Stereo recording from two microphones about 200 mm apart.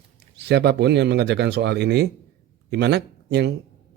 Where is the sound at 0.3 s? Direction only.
55° right (ahead or behind).